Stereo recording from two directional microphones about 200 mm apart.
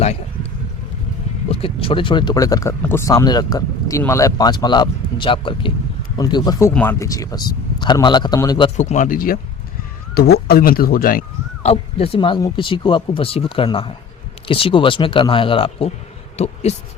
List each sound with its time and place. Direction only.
1.5 s speech: 30° left (ahead or behind)
8.8 s speech: 40° left (ahead or behind)